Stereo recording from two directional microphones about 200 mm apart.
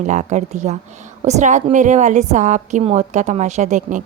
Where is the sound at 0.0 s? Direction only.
35° right (ahead or behind).